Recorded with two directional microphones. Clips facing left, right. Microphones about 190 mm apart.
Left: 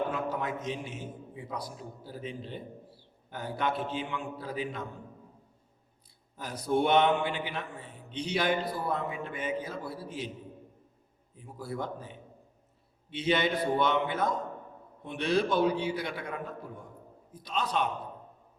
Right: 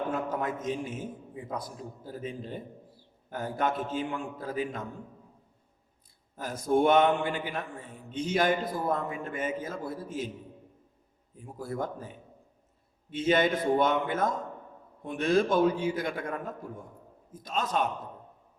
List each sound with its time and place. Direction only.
0.1 s a sound: 50° right (ahead or behind)
1.5 s a man's voice: 50° right (ahead or behind)
6.3 s a man's voice: 50° right (ahead or behind)
11.3 s a man's voice: 45° right (ahead or behind)